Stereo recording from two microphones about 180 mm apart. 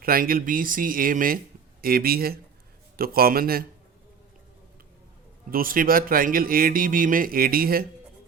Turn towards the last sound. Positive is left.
turn(degrees=-55)  # may be behind; listen again after turning